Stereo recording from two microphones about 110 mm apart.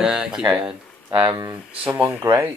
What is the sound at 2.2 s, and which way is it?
Speech, 25° right (ahead or behind).